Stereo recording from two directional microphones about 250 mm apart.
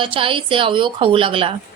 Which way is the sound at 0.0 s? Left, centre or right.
Right.